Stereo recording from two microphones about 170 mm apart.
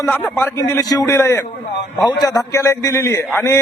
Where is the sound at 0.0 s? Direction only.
15° left (ahead or behind).